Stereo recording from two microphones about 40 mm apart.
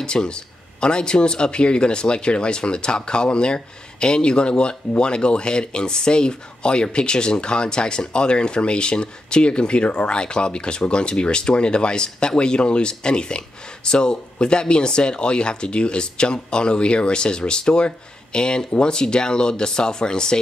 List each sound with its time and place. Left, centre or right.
0.0 s speech: left